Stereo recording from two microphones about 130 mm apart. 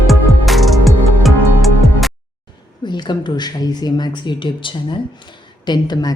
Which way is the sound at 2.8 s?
35° left (ahead or behind).